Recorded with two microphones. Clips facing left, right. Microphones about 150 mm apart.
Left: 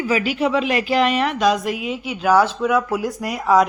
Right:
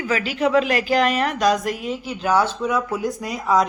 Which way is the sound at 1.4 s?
5° left (ahead or behind).